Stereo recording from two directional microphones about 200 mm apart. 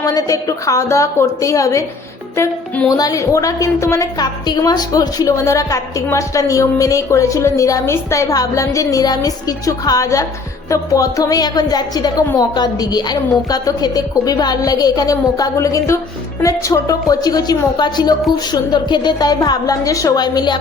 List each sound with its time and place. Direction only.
0.0 s a woman's voice: 20° left (ahead or behind)